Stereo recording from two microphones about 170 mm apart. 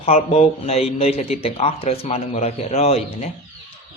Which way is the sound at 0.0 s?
40° left (ahead or behind).